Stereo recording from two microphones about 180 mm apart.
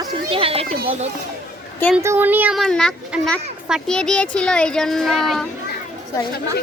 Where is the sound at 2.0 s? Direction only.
15° right (ahead or behind).